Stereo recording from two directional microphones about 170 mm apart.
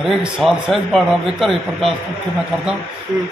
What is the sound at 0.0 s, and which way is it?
A man's voice, centre (ahead or behind).